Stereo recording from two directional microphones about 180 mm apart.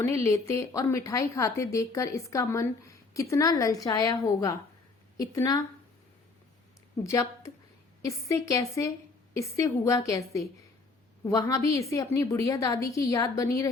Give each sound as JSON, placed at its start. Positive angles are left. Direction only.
{"t": 0.0, "sound": "speech", "side_deg": 15}
{"t": 7.0, "sound": "speech", "side_deg": 15}